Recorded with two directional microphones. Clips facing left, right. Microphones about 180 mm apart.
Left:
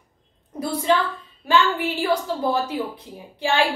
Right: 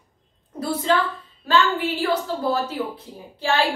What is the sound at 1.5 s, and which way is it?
A woman's voice, 10° left (ahead or behind).